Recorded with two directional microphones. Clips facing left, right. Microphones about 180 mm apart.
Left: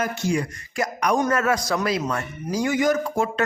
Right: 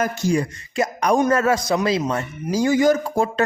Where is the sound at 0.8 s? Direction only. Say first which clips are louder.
Right 4 dB; 25° right (ahead or behind).